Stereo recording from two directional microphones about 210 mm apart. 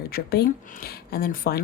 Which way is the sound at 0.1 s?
45° left (ahead or behind).